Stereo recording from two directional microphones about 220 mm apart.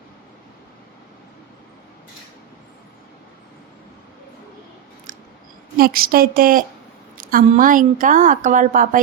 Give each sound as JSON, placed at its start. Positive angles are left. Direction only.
{"t": 5.7, "sound": "a woman's voice", "side_deg": -40}